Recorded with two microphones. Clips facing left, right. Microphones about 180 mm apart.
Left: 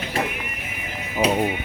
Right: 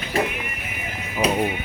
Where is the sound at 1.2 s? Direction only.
20° left (ahead or behind).